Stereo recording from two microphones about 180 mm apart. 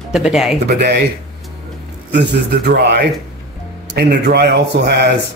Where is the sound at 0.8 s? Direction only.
65° right (ahead or behind).